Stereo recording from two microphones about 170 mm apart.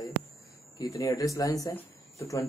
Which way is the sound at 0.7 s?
25° left (ahead or behind).